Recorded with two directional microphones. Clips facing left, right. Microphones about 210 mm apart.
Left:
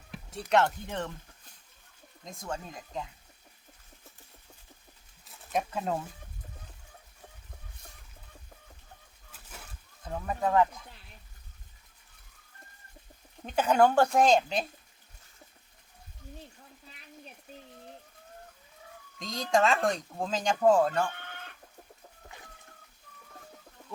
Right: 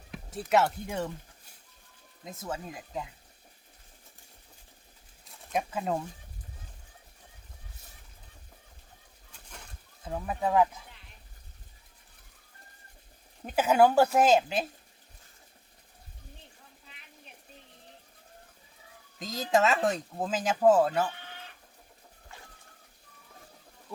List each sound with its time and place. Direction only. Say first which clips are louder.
0.3 s speech: even; 5° right (ahead or behind)
2.2 s speech: right 1 dB; 5° right (ahead or behind)
5.3 s speech: even; centre (ahead or behind)
9.5 s a sound: left 1 dB; 5° left (ahead or behind)
10.0 s speech: even; 5° right (ahead or behind)
13.4 s speech: right 1 dB; 5° right (ahead or behind)
19.2 s speech: right 1 dB; 5° right (ahead or behind)
21.1 s livestock: left 1 dB; 55° left (ahead or behind)